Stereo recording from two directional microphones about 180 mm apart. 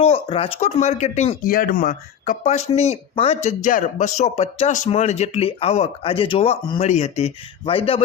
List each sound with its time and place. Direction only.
0.0 s speech: 35° left (ahead or behind)
1.5 s speech: 50° left (ahead or behind); by 8.0 s 30° left (ahead or behind)